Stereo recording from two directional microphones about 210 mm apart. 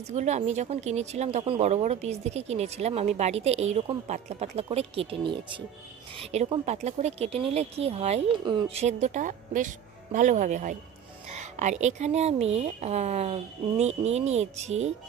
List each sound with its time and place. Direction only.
0.0 s speech: 30° right (ahead or behind)